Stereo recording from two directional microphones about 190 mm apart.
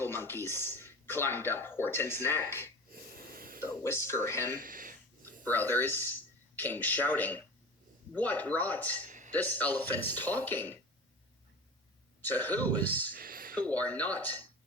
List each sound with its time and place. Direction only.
0.0 s speech: 10° left (ahead or behind)
2.9 s snort: 50° right (ahead or behind)
3.6 s speech: 15° left (ahead or behind)
4.5 s a sound: 45° right (ahead or behind)
5.5 s speech: 10° left (ahead or behind)
9.0 s a sound: 40° right (ahead or behind)
9.3 s speech: 10° left (ahead or behind)
12.2 s speech: 10° left (ahead or behind)
13.1 s a sound: 50° right (ahead or behind)
13.6 s speech: 10° left (ahead or behind)